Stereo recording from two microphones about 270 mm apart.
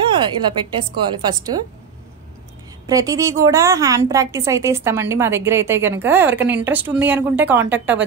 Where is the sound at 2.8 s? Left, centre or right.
Centre.